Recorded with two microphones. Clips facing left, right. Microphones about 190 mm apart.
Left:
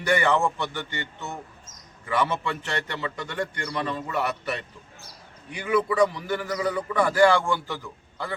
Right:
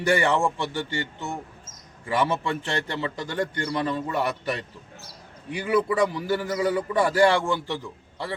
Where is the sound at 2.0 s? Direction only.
30° right (ahead or behind).